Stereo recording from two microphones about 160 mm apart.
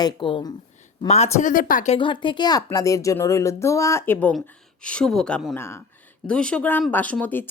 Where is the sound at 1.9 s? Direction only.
30° left (ahead or behind); by 5.5 s 5° left (ahead or behind).